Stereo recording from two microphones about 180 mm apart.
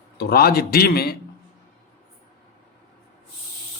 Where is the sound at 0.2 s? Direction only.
60° left (ahead or behind).